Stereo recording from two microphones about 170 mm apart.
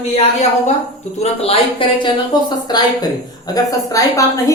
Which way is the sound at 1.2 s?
35° left (ahead or behind).